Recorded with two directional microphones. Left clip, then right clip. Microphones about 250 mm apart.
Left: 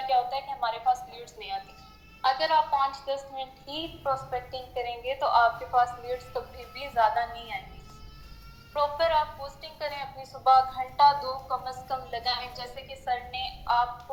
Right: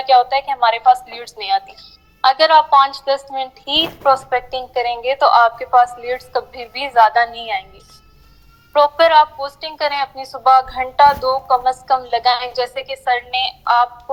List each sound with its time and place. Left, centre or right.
0.1 s a woman's voice: right
8.7 s a woman's voice: right